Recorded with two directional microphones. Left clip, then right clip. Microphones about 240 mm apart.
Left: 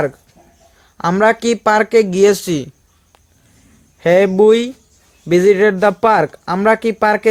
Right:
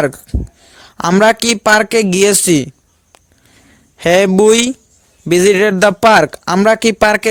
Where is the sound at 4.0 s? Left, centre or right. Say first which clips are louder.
Right 1 dB; right.